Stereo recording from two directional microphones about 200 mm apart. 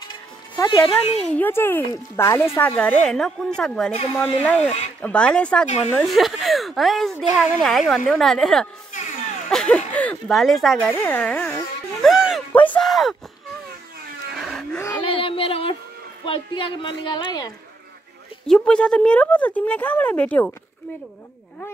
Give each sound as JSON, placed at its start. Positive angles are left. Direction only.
{"t": 0.1, "sound": "music", "side_deg": 25}
{"t": 1.2, "sound": "speech", "side_deg": 10}
{"t": 8.9, "sound": "music", "side_deg": 35}
{"t": 9.5, "sound": "speech", "side_deg": 5}
{"t": 14.3, "sound": "a sound", "side_deg": 0}
{"t": 15.0, "sound": "a sound", "side_deg": 25}
{"t": 16.3, "sound": "a woman's voice", "side_deg": 25}
{"t": 18.5, "sound": "speech", "side_deg": 5}